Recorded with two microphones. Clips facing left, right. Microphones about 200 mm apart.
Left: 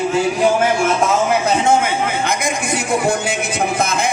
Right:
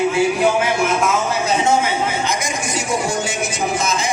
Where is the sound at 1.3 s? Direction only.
55° left (ahead or behind).